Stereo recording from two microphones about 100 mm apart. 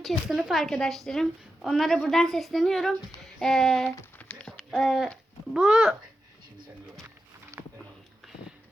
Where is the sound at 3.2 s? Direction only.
5° left (ahead or behind).